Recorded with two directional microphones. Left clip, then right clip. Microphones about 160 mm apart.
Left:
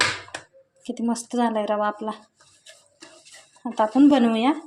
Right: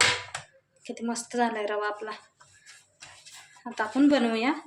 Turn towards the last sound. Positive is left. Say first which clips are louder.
# left 5 dB
turn(degrees=40)  # may be behind; listen again after turning